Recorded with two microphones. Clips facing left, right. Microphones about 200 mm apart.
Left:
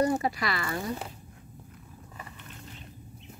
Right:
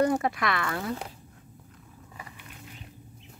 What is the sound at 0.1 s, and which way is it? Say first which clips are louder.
Speech: right 2 dB; centre (ahead or behind).